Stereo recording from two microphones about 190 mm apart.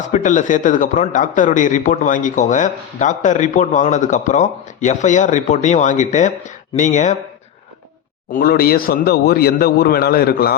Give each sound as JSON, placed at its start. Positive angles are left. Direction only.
{"t": 0.1, "sound": "speech", "side_deg": 40}
{"t": 8.3, "sound": "a man's voice", "side_deg": 50}